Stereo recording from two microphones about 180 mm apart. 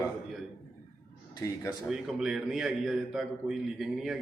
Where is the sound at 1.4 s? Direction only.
15° left (ahead or behind).